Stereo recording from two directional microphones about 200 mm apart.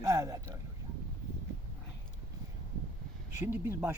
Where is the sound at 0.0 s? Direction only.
15° right (ahead or behind).